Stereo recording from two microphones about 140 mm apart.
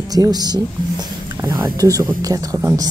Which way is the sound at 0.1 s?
30° right (ahead or behind).